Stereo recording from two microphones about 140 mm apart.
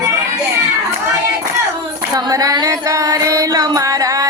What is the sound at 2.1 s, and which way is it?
Music, 25° right (ahead or behind).